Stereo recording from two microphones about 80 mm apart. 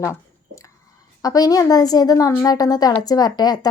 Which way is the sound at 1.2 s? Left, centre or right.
Left.